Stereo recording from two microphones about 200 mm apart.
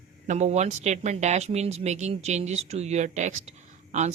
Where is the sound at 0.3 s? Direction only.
35° right (ahead or behind).